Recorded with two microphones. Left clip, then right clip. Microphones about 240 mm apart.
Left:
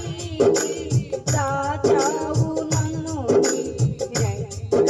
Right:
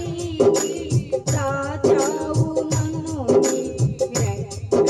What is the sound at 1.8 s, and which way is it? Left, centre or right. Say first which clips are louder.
Music: right 2 dB; right.